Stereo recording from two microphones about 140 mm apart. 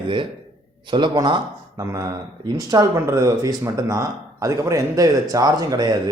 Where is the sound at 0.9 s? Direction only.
35° right (ahead or behind).